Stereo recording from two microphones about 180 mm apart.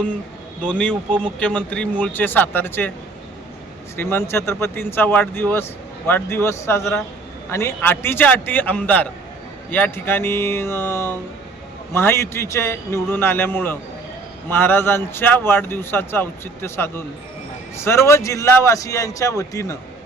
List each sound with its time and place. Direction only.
0.6 s a man's voice: 5° left (ahead or behind)
3.9 s a man's voice: 15° left (ahead or behind)